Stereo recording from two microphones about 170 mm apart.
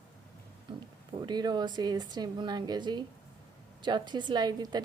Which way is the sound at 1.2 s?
25° right (ahead or behind).